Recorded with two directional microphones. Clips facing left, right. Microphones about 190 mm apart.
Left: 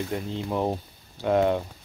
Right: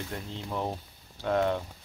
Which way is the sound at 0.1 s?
15° left (ahead or behind).